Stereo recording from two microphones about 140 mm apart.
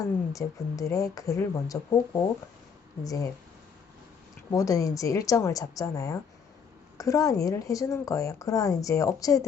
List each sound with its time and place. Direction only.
0.0 s a woman's voice: 25° left (ahead or behind)
3.0 s a woman's voice: 25° left (ahead or behind)
4.5 s a woman's voice: 25° left (ahead or behind)